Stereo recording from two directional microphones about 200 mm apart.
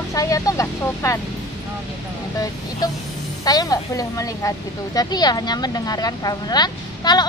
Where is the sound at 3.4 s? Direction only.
20° left (ahead or behind).